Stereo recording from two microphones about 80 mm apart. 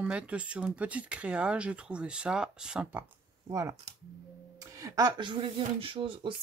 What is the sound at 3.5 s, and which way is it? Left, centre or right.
Speech, right.